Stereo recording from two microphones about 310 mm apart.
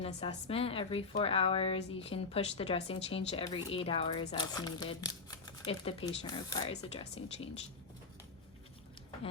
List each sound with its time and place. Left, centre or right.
0.0 s a woman's voice: centre